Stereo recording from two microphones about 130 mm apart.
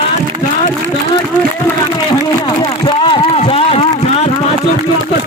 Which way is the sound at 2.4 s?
40° left (ahead or behind).